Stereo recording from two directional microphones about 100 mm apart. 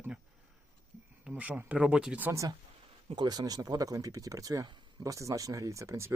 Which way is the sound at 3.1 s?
45° right (ahead or behind).